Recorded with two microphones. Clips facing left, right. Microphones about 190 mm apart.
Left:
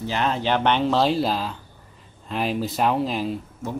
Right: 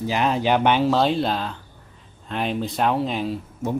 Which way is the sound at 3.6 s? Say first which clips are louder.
Right 7 dB; 20° right (ahead or behind).